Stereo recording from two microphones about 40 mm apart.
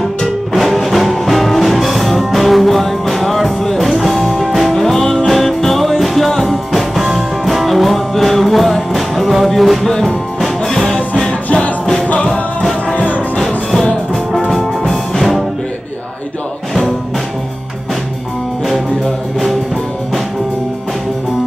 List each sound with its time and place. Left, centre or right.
0.5 s music: centre
12.9 s music: left
14.5 s music: centre